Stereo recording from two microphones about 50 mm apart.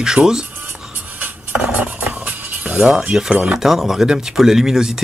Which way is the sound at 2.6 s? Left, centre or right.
Centre.